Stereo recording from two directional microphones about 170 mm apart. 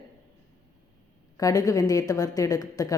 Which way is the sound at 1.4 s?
20° left (ahead or behind).